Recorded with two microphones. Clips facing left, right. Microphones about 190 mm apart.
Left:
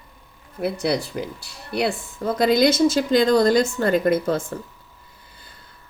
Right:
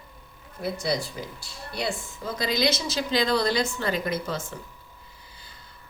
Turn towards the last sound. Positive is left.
turn(degrees=55)  # may be behind; listen again after turning